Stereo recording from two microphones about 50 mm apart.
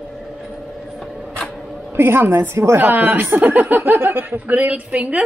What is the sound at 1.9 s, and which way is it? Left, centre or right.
A woman's voice, right.